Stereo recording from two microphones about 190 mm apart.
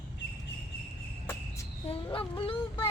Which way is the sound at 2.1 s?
30° left (ahead or behind).